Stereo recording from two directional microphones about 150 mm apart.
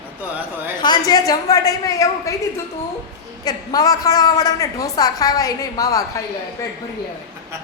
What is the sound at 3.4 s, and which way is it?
A woman's voice, 25° left (ahead or behind).